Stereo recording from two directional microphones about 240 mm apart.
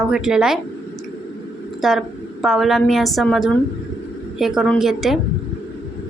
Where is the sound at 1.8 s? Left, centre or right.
Centre.